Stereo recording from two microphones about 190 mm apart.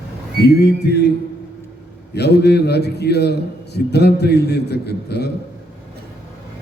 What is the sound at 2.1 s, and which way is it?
A man's voice, 60° left (ahead or behind).